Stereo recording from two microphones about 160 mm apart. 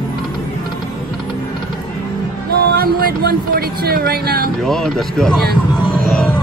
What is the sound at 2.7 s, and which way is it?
Speech, 70° right (ahead or behind).